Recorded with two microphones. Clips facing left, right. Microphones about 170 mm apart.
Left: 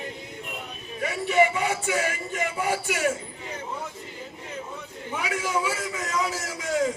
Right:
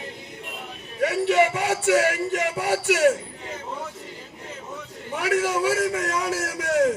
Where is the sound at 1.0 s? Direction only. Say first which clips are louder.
Right 3 dB; 75° right (ahead or behind).